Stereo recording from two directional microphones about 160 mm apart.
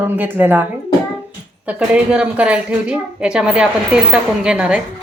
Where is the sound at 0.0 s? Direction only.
10° right (ahead or behind).